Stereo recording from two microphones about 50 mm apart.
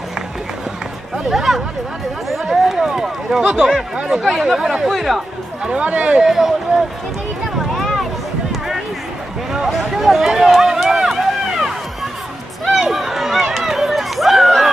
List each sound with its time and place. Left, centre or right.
1.1 s a sound: centre
2.4 s speech: centre
4.2 s speech: centre
4.6 s speech: centre
4.8 s speech: centre
5.6 s speech: right
6.2 s speech: centre
7.8 s a sound: centre
9.5 s run: centre